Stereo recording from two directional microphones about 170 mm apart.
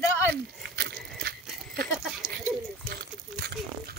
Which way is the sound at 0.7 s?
65° right (ahead or behind).